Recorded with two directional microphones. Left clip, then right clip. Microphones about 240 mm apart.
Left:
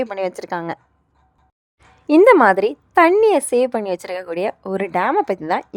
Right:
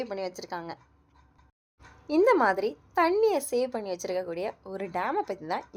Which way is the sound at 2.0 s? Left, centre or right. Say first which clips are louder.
Left 12 dB; left.